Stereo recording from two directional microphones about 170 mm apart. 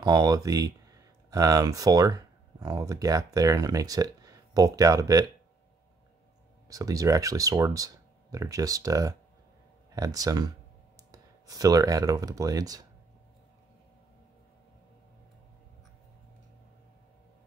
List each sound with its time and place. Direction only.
0.0 s speech: 20° right (ahead or behind)
6.7 s speech: 20° right (ahead or behind)